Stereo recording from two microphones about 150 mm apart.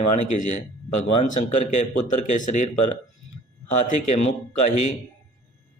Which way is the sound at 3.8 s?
55° left (ahead or behind).